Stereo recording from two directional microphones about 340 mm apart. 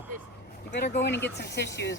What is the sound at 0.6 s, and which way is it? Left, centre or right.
Speech, left.